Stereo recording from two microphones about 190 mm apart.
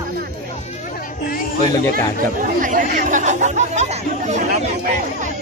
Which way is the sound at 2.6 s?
45° right (ahead or behind).